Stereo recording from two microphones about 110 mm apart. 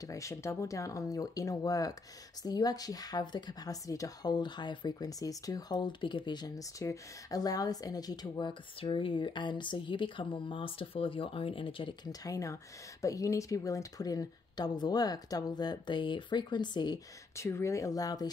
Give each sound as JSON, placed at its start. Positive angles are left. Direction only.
{"t": 0.1, "sound": "a woman's voice", "side_deg": 30}
{"t": 12.1, "sound": "a woman's voice", "side_deg": 30}
{"t": 17.4, "sound": "a woman's voice", "side_deg": 25}